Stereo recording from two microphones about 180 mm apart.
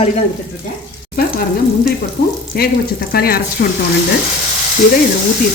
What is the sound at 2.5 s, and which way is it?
Speech, 55° left (ahead or behind).